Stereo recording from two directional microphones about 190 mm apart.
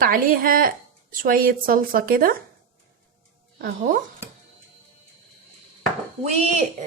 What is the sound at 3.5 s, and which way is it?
Speech, 45° right (ahead or behind).